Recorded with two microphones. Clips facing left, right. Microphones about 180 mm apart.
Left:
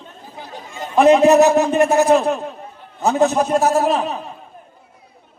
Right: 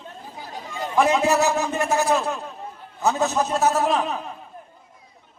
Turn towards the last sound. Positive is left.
turn(degrees=25)  # may be behind; listen again after turning